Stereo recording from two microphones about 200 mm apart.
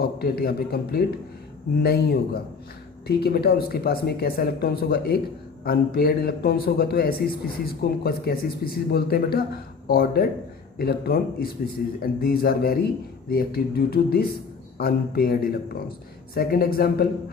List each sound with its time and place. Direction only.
0.0 s speech: 50° left (ahead or behind)